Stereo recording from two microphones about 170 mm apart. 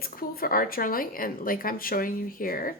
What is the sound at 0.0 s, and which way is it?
A woman's voice, 60° left (ahead or behind).